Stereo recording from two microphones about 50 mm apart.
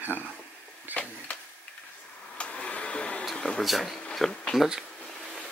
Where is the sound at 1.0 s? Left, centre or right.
Left.